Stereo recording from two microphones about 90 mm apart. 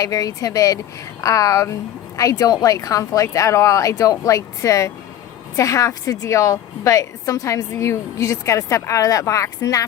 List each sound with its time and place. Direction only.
0.0 s a woman's voice: 40° left (ahead or behind)